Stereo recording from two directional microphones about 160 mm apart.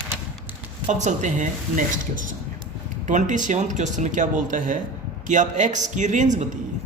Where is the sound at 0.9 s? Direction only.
45° right (ahead or behind).